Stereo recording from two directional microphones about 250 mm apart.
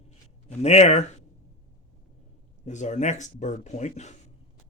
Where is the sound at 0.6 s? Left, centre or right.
Left.